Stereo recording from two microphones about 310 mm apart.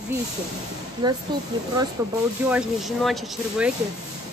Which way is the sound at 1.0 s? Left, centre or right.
Centre.